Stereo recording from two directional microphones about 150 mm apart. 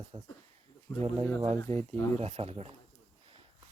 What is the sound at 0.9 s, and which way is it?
Speech, 20° left (ahead or behind).